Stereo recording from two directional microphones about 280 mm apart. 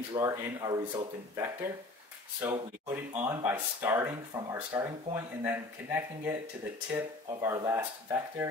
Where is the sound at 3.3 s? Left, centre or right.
Centre.